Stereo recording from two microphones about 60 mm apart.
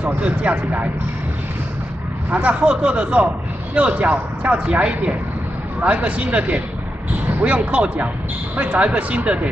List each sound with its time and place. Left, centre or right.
0.0 s speech: right
2.3 s speech: right